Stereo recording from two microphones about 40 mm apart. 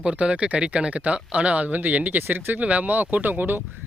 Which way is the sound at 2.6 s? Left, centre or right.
Right.